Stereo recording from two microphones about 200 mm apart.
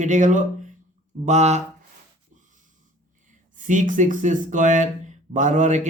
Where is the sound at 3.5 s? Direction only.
40° right (ahead or behind).